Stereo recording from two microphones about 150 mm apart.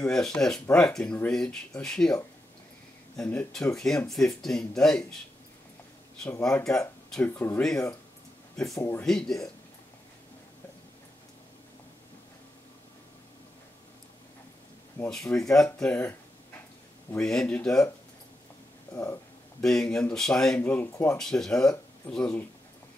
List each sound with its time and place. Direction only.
0.0 s speech: 5° left (ahead or behind)
3.2 s speech: 5° left (ahead or behind)
6.4 s speech: 5° left (ahead or behind)
8.7 s speech: 20° left (ahead or behind)
9.0 s speech: 5° left (ahead or behind)
15.4 s speech: 5° left (ahead or behind)
17.2 s speech: 5° left (ahead or behind)
19.6 s speech: 5° left (ahead or behind)
21.2 s speech: 5° left (ahead or behind)